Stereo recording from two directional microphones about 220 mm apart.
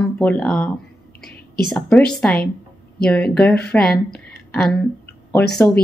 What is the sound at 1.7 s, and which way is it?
Speech, centre (ahead or behind).